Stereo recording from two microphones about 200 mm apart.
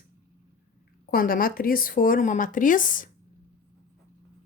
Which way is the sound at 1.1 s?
45° left (ahead or behind).